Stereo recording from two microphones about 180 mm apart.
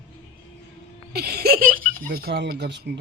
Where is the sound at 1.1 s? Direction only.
60° right (ahead or behind).